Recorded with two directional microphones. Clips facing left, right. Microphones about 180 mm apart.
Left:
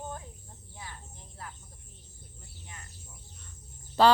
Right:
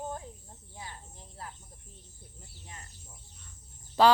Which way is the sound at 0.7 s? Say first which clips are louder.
Right 1 dB; 25° right (ahead or behind).